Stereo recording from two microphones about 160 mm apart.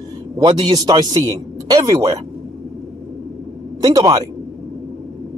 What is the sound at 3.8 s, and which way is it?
Speech, 20° right (ahead or behind).